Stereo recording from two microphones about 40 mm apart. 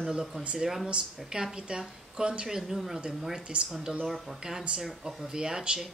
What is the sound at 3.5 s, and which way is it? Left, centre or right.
Speech, right.